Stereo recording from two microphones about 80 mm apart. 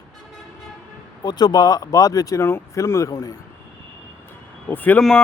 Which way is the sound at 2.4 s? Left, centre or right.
Left.